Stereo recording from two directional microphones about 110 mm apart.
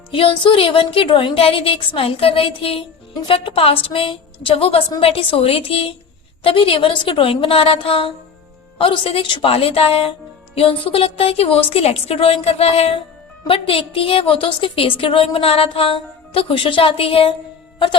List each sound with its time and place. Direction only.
0.1 s a woman's voice: 55° left (ahead or behind)